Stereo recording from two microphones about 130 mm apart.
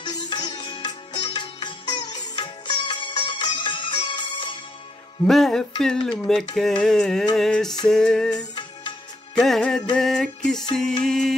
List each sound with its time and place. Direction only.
0.0 s music: 35° left (ahead or behind)
5.2 s music: 5° left (ahead or behind)